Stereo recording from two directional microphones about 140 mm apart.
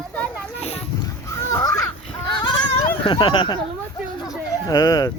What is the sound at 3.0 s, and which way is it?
Speech, 35° left (ahead or behind).